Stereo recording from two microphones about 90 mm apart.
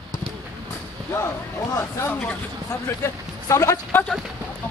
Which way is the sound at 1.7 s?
30° left (ahead or behind).